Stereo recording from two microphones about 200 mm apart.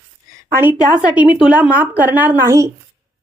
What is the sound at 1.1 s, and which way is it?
A woman's voice, 5° right (ahead or behind).